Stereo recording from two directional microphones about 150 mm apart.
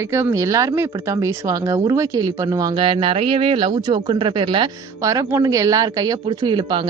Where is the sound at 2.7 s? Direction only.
35° right (ahead or behind).